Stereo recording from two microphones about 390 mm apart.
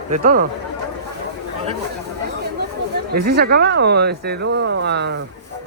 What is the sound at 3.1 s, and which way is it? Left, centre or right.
Speech, right.